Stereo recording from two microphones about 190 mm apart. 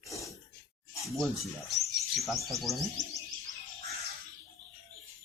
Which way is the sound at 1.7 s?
Centre (ahead or behind).